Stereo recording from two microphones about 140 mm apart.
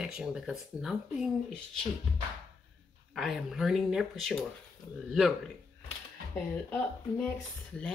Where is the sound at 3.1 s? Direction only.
Centre (ahead or behind).